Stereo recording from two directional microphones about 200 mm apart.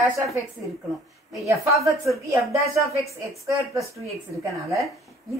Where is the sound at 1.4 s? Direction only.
15° right (ahead or behind).